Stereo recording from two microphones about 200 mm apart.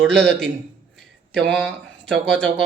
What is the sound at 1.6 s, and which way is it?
Speech, centre (ahead or behind).